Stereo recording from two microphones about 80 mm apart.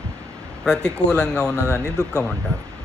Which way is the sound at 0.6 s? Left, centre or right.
Centre.